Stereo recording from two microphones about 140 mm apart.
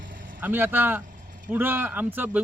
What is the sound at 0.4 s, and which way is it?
Speech, 15° right (ahead or behind).